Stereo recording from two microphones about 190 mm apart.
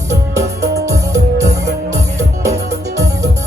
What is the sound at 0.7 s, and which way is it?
Music, 15° right (ahead or behind).